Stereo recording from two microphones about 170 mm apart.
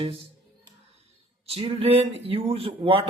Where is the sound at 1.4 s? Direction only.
35° right (ahead or behind).